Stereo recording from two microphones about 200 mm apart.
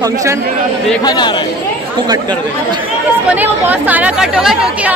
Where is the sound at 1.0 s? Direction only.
20° left (ahead or behind).